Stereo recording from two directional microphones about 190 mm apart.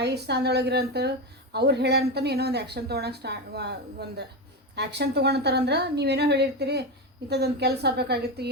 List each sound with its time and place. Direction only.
0.0 s a woman's voice: 60° right (ahead or behind)